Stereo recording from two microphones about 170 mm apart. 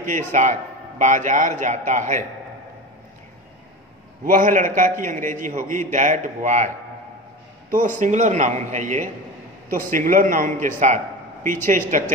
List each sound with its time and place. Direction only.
0.1 s a man's voice: 45° right (ahead or behind)
4.2 s a man's voice: 55° right (ahead or behind)
7.8 s a man's voice: 45° right (ahead or behind)